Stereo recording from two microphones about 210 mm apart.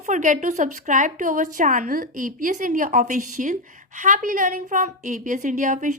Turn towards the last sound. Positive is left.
turn(degrees=-35)  # may be behind; listen again after turning